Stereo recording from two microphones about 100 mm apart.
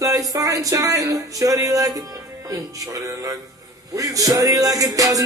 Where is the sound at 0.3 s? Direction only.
35° right (ahead or behind).